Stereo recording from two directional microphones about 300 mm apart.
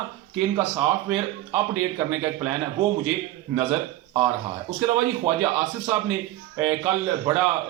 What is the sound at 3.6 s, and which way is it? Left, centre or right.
Speech, centre.